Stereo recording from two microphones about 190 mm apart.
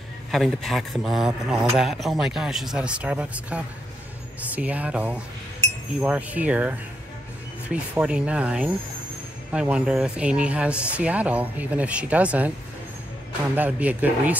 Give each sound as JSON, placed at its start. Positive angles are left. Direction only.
{"t": 0.3, "sound": "speech", "side_deg": 0}
{"t": 13.6, "sound": "speech", "side_deg": -5}